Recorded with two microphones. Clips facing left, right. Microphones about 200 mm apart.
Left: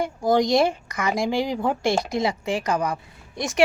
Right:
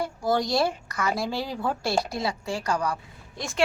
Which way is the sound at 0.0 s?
20° left (ahead or behind).